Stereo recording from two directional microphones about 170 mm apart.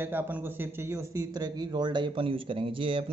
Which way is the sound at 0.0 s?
10° right (ahead or behind).